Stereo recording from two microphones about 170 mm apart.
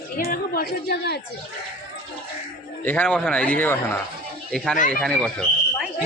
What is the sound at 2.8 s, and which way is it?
A man's voice, 10° left (ahead or behind).